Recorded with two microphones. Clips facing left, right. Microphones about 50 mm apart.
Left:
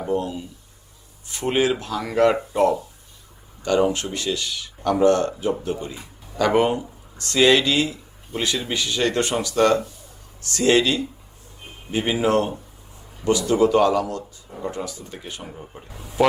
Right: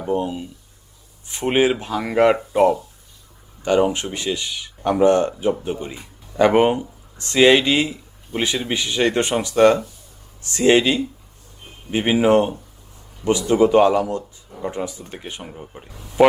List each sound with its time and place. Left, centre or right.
0.1 s speech: right
15.4 s speech: centre
15.9 s a man's voice: centre